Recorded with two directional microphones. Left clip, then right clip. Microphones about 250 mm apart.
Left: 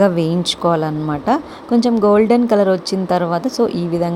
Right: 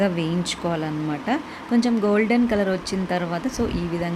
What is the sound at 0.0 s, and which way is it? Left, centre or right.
Speech, left.